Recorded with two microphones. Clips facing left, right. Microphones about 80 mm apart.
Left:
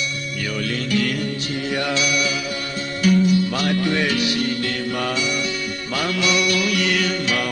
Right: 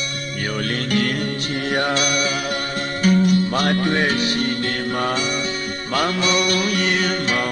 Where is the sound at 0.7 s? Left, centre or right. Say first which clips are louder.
Even; right.